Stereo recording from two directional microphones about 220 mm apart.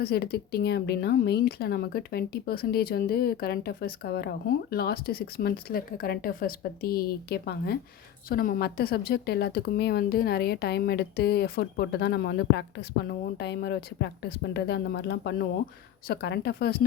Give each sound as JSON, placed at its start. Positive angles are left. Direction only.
{"t": 0.0, "sound": "speech", "side_deg": 45}